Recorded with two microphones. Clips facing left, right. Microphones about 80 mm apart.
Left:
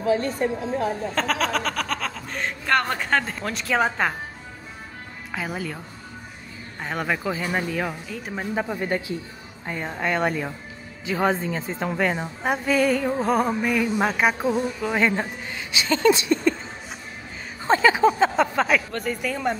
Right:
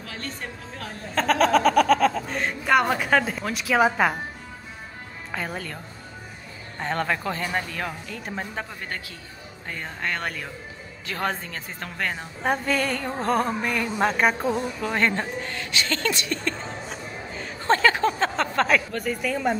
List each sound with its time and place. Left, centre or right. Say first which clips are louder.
0.0 s a woman's voice: left 13 dB; centre
1.1 s music: right 4 dB; centre
5.3 s music: left 2 dB; centre
6.8 s speech: right 1 dB; centre
8.6 s speech: left 9 dB; centre
12.0 s music: left 1 dB; centre
17.6 s speech: left 3 dB; centre